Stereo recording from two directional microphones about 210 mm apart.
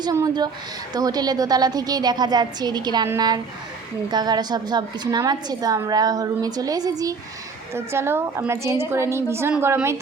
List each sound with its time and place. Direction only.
0.0 s a woman's voice: 20° right (ahead or behind)